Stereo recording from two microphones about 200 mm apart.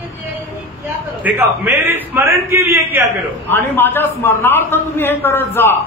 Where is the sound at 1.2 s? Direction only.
10° right (ahead or behind).